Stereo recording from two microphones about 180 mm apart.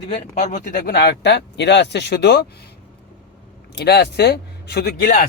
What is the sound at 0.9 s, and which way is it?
Speech, 70° left (ahead or behind).